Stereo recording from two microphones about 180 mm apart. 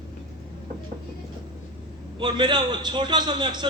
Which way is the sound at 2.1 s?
25° right (ahead or behind).